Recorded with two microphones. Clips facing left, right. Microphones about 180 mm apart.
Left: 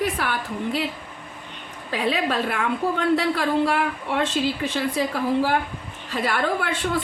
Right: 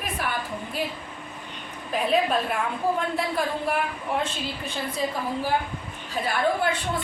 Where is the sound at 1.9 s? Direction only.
85° left.